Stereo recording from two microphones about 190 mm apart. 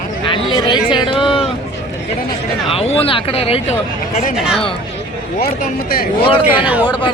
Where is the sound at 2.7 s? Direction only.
30° left (ahead or behind).